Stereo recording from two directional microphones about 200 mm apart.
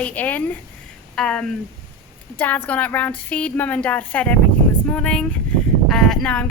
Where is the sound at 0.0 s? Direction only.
10° left (ahead or behind).